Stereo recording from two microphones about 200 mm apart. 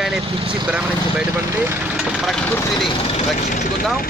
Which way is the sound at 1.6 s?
5° right (ahead or behind).